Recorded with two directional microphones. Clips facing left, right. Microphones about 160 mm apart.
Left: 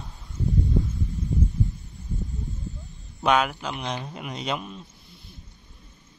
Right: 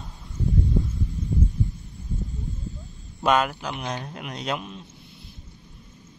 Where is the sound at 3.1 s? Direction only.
Centre (ahead or behind).